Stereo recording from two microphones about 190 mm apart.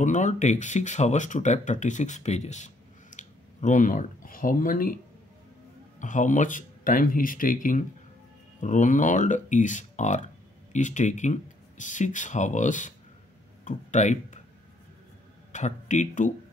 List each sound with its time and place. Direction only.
0.0 s speech: 40° left (ahead or behind)
15.5 s speech: 40° left (ahead or behind)